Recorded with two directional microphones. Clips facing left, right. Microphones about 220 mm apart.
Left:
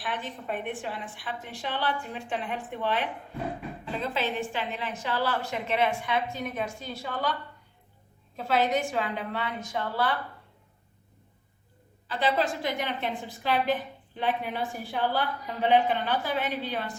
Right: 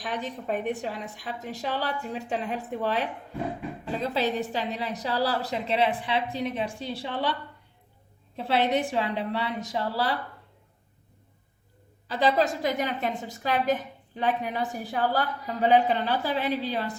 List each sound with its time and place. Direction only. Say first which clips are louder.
0.0 s a woman's voice: right 3 dB; 40° right (ahead or behind)
8.4 s a woman's voice: right 1 dB; 30° right (ahead or behind)
12.0 s a woman's voice: right 3 dB; 40° right (ahead or behind)